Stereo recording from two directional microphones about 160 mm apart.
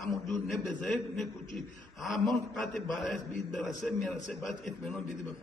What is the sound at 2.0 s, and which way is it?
A man's voice, centre (ahead or behind).